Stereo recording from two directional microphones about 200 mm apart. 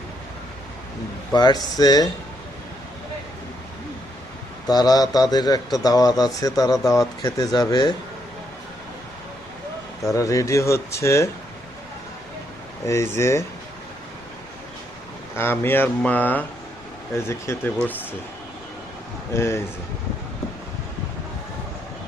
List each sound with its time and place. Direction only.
1.3 s a man's voice: 20° left (ahead or behind)
4.6 s a man's voice: 20° left (ahead or behind)
10.1 s speech: 15° left (ahead or behind)
12.8 s speech: 15° left (ahead or behind)
15.4 s speech: 10° left (ahead or behind)
19.3 s speech: 15° left (ahead or behind)